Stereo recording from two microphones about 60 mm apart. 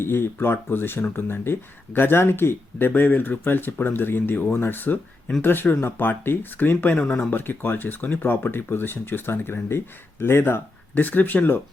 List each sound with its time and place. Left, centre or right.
0.0 s speech: left
7.0 s speech: centre
7.3 s speech: left